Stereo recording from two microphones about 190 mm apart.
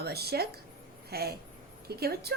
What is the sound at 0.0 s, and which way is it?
A woman's voice, 55° right (ahead or behind).